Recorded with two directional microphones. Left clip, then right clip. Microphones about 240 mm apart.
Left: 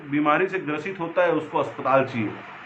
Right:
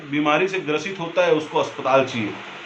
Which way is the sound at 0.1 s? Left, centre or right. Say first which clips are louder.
Right 2 dB; right.